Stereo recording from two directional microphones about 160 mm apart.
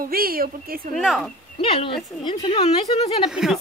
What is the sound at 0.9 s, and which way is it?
Speech, centre (ahead or behind).